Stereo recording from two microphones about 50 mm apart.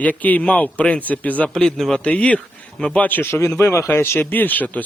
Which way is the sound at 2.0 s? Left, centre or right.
Left.